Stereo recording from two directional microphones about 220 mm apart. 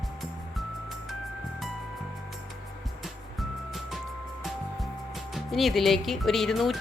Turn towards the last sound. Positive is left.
turn(degrees=0)  # may be behind; listen again after turning